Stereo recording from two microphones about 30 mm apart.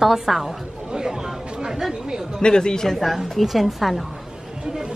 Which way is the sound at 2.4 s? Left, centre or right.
Left.